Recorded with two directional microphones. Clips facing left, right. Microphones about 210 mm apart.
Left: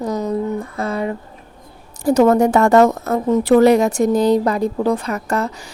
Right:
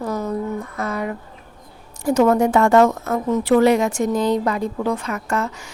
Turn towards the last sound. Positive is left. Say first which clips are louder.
# left 3 dB
turn(degrees=35)  # may be behind; listen again after turning